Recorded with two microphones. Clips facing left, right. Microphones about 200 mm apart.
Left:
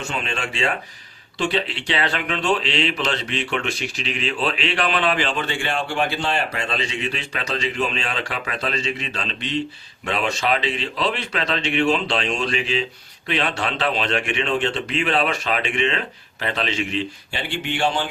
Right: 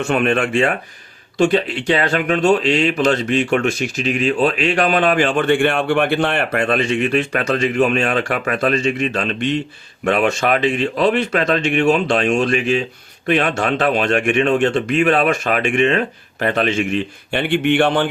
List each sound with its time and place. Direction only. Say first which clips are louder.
0.0 s speech: right 11 dB; 55° right (ahead or behind)